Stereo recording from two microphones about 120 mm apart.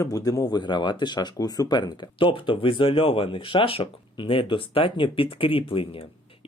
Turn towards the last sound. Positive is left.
turn(degrees=50)  # may be behind; listen again after turning